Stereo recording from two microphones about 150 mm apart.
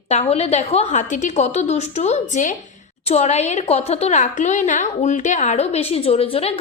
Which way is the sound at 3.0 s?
45° left (ahead or behind).